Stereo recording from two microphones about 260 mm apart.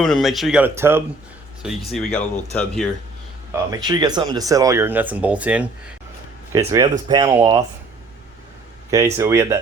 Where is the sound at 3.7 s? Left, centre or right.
Centre.